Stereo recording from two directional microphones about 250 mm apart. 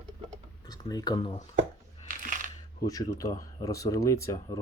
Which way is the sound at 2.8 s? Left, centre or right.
Centre.